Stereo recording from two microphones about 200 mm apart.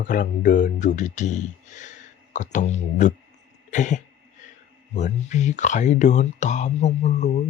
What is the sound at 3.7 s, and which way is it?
Throat clearing, 40° left (ahead or behind).